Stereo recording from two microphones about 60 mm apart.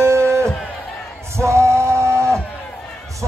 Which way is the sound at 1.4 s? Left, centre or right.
Right.